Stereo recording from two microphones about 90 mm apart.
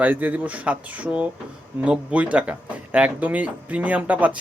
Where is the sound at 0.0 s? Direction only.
20° right (ahead or behind).